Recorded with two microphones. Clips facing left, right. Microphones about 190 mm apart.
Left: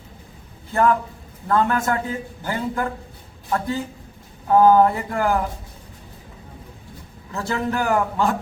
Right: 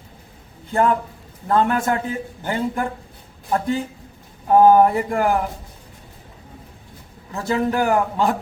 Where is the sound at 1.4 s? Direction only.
20° right (ahead or behind).